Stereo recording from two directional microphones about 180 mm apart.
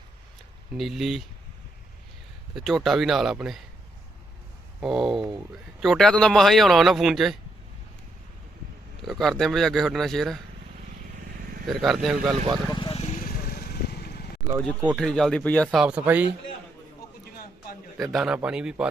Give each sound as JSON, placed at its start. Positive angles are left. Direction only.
{"t": 0.8, "sound": "a man's voice", "side_deg": 0}
{"t": 2.6, "sound": "a man's voice", "side_deg": 0}
{"t": 4.8, "sound": "a man's voice", "side_deg": 0}
{"t": 9.0, "sound": "a man's voice", "side_deg": 0}
{"t": 11.2, "sound": "vehicle", "side_deg": -55}
{"t": 11.6, "sound": "a man's voice", "side_deg": 0}
{"t": 12.7, "sound": "vehicle", "side_deg": 30}
{"t": 14.8, "sound": "a man's voice", "side_deg": 0}
{"t": 17.9, "sound": "a man's voice", "side_deg": 0}